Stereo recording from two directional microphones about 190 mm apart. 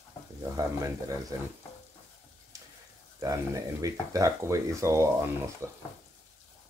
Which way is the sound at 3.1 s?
15° right (ahead or behind).